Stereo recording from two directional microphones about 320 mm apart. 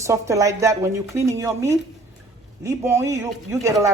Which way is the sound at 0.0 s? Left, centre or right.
Centre.